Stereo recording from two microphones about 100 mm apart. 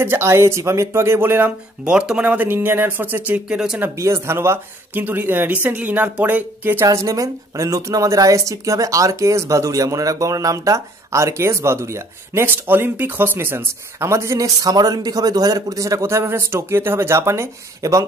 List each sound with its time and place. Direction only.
0.0 s speech: 25° right (ahead or behind)
1.9 s speech: 10° right (ahead or behind)
4.0 s speech: 25° right (ahead or behind)